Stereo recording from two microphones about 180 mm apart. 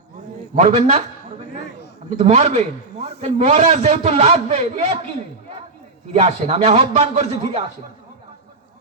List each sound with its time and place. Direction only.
0.6 s a man's voice: 35° right (ahead or behind)
2.0 s a man's voice: 35° right (ahead or behind)
6.1 s a man's voice: 35° right (ahead or behind)